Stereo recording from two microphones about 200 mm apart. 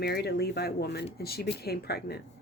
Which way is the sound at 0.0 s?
55° left (ahead or behind).